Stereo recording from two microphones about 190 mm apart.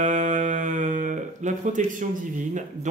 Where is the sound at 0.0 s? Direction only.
40° right (ahead or behind).